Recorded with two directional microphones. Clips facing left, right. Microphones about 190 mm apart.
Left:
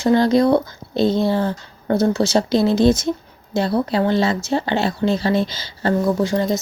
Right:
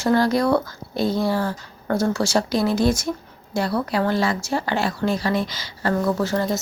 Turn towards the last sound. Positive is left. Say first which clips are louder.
# left 3 dB
turn(degrees=15)  # may be behind; listen again after turning